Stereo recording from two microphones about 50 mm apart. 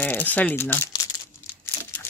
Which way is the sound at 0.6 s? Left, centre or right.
Left.